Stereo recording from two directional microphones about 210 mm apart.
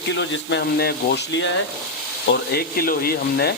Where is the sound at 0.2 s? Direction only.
50° left (ahead or behind).